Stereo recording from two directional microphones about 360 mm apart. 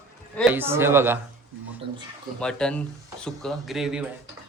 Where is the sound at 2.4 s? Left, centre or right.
Centre.